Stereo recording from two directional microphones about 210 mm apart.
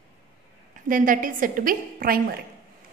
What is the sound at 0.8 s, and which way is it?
A woman's voice, 40° right (ahead or behind).